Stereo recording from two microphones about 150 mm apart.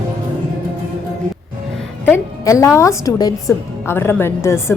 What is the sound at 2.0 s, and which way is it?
A woman's voice, 20° left (ahead or behind).